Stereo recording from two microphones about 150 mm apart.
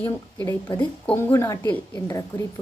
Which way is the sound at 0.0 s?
15° left (ahead or behind).